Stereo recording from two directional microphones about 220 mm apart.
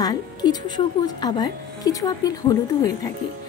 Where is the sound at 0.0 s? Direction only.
15° left (ahead or behind).